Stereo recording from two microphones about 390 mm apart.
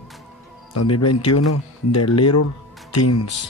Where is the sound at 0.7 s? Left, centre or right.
Left.